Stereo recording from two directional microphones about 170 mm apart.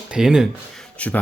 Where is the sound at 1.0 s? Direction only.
10° left (ahead or behind).